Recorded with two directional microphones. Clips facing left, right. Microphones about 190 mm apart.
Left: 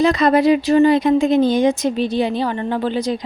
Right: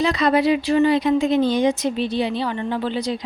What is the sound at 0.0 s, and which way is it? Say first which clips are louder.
Speech: left 4 dB; 50° left (ahead or behind).